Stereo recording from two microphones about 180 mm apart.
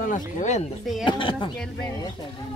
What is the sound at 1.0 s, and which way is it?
Speech, 25° left (ahead or behind).